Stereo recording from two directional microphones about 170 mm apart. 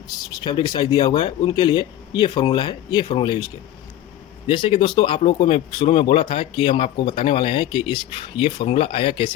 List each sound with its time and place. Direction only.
0.2 s speech: 25° left (ahead or behind)
4.4 s speech: 30° left (ahead or behind)